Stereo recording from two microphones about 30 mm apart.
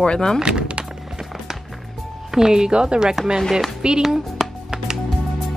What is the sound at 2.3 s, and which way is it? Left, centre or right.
Speech, right.